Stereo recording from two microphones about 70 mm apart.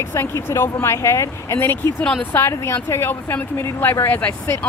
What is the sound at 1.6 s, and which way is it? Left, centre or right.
Speech, left.